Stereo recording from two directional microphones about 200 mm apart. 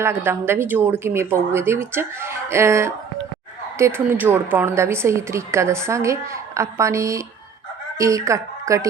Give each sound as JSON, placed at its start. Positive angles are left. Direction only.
{"t": 0.0, "sound": "a woman's voice", "side_deg": -10}